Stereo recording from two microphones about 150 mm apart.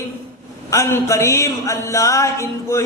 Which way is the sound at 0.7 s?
20° left (ahead or behind).